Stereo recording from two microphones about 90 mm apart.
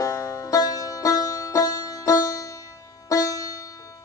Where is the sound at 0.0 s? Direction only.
35° left (ahead or behind).